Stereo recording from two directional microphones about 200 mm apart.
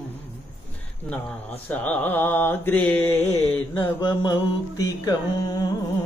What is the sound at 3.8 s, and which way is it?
Carnatic music, 20° left (ahead or behind).